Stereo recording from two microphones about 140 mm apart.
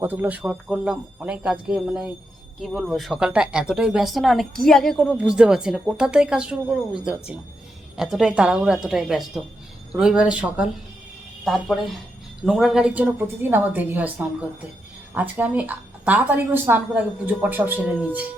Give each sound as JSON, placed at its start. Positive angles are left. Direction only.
{"t": 0.0, "sound": "a woman's voice", "side_deg": -15}
{"t": 5.1, "sound": "a woman's voice", "side_deg": -10}